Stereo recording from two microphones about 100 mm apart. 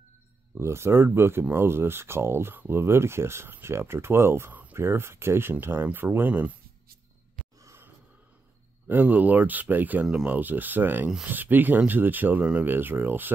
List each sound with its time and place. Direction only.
0.6 s speech: 25° right (ahead or behind)
7.6 s a sound: 25° right (ahead or behind)
8.8 s speech: 20° right (ahead or behind)